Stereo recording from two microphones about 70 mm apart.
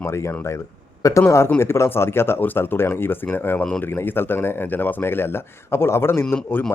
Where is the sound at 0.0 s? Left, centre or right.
Left.